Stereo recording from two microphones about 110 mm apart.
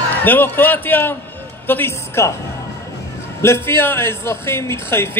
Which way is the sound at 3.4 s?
25° left (ahead or behind).